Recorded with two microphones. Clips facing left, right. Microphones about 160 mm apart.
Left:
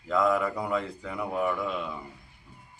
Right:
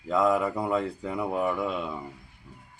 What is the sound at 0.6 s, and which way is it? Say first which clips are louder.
Speech: right 3 dB; 35° right (ahead or behind).